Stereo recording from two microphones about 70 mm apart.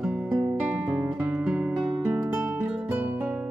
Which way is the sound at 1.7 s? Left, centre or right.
Centre.